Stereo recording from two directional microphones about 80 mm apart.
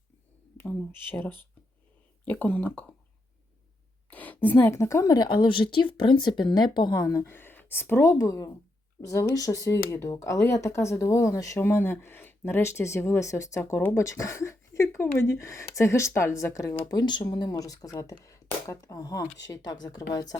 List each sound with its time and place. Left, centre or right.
0.5 s speech: left
4.1 s a sound: centre
4.7 s speech: left
5.0 s speech: left
7.1 s speech: left
8.1 s speech: left
16.8 s speech: left